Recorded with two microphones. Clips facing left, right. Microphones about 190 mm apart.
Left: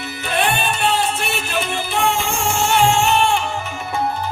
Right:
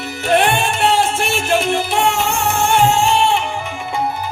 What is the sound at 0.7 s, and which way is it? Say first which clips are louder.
Music: right 4 dB; 90° right.